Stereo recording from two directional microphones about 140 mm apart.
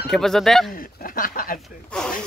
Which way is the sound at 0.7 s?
90° left.